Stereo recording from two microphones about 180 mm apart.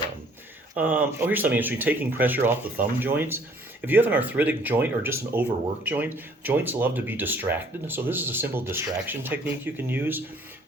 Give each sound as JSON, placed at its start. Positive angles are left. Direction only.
{"t": 0.8, "sound": "speech", "side_deg": -10}